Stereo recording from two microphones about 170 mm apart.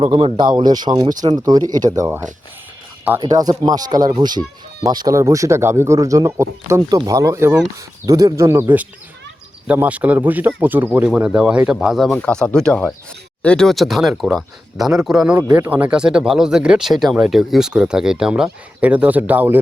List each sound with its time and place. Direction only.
0.0 s a man's voice: 35° right (ahead or behind); by 19.5 s 10° right (ahead or behind)